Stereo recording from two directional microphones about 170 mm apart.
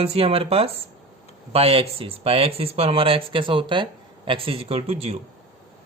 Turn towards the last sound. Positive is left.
turn(degrees=-35)  # may be behind; listen again after turning